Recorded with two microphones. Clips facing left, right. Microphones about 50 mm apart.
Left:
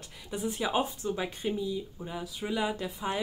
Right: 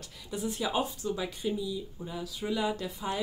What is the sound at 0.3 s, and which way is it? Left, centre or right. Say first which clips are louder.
Speech: left 1 dB; left.